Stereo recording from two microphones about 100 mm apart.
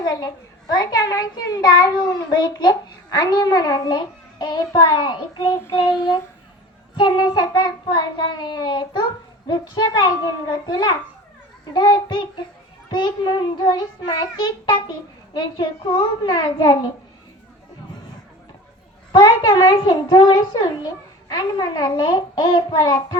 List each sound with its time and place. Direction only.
0.0 s a child's voice: 40° left (ahead or behind)
6.9 s child singing: 50° left (ahead or behind)
19.2 s a child's voice: 40° left (ahead or behind)